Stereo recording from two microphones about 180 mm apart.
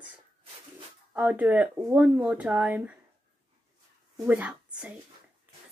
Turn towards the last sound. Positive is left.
turn(degrees=-10)  # may be behind; listen again after turning